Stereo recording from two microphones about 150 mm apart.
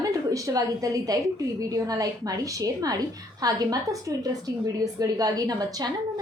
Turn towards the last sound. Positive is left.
turn(degrees=-25)  # may be behind; listen again after turning